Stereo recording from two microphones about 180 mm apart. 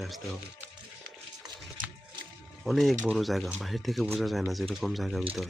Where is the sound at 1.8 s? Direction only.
50° right (ahead or behind).